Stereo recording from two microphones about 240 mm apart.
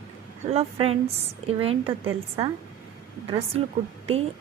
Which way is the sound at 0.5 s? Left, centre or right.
Right.